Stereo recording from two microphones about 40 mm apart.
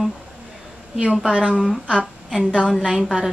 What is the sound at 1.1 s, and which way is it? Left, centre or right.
Female singing, right.